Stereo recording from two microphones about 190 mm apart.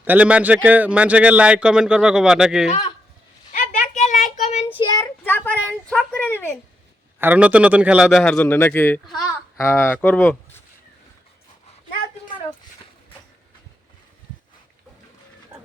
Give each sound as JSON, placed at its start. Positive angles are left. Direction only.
{"t": 0.0, "sound": "speech", "side_deg": -10}
{"t": 3.5, "sound": "a sound", "side_deg": 40}
{"t": 4.2, "sound": "child singing", "side_deg": 35}
{"t": 4.8, "sound": "child singing", "side_deg": 20}
{"t": 5.2, "sound": "a sound", "side_deg": 10}
{"t": 7.2, "sound": "speech", "side_deg": -10}
{"t": 8.2, "sound": "speech", "side_deg": 10}